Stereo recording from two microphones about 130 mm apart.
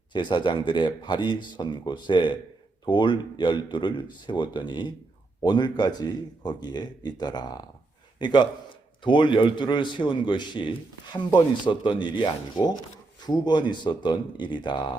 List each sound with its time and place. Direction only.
0.1 s a man's voice: 35° left (ahead or behind)